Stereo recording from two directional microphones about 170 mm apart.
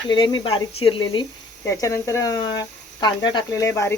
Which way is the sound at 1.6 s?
15° left (ahead or behind).